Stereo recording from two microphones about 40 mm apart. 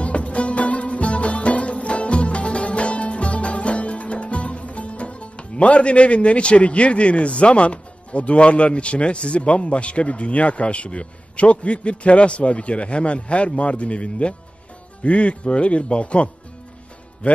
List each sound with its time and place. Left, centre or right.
0.0 s music: left
15.0 s a man's voice: left